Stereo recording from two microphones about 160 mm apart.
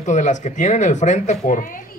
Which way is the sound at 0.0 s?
50° left (ahead or behind).